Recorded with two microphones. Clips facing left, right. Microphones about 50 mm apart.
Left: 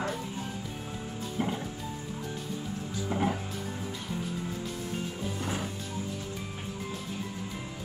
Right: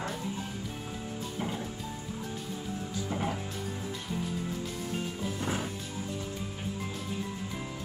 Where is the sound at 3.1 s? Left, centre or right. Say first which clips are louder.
Left 4 dB; centre.